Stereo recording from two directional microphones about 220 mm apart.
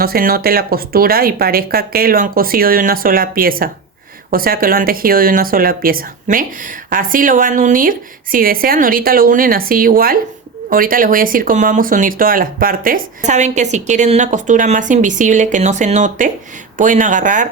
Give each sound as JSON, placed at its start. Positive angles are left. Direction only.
{"t": 0.0, "sound": "speech", "side_deg": -40}